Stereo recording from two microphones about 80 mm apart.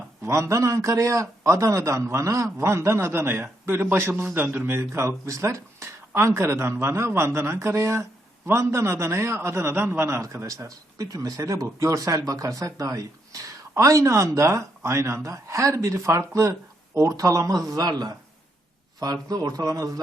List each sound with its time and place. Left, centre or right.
0.2 s a man's voice: right